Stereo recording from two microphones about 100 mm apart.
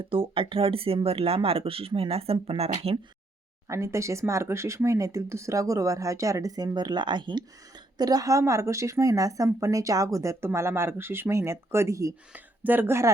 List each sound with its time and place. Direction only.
0.0 s speech: 65° right (ahead or behind); by 3.0 s 90° right
3.7 s a woman's voice: 30° right (ahead or behind)
12.3 s speech: 20° right (ahead or behind)